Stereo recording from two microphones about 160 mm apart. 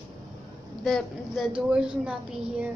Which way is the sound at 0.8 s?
Centre (ahead or behind).